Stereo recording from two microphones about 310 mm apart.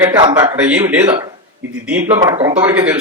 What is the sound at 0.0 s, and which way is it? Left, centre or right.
Speech, centre.